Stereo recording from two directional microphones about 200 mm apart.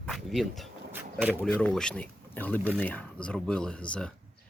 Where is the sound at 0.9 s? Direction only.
10° right (ahead or behind).